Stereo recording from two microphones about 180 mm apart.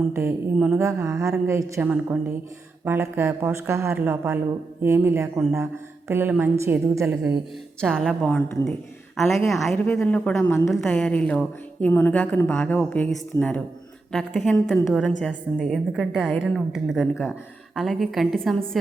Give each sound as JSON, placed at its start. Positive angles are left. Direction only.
{"t": 0.1, "sound": "a woman's voice", "side_deg": -15}
{"t": 7.8, "sound": "a woman's voice", "side_deg": 5}